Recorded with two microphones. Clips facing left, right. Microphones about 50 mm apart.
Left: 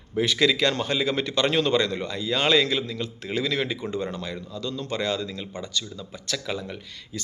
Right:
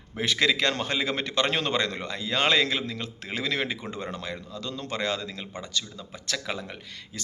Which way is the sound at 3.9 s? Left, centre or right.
Right.